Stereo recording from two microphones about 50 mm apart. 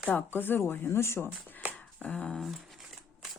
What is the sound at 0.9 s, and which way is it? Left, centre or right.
Speech, left.